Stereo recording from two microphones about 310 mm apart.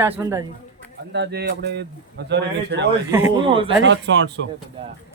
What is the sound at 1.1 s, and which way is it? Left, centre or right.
Speech, right.